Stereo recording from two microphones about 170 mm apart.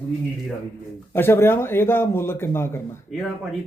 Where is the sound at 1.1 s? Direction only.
15° left (ahead or behind).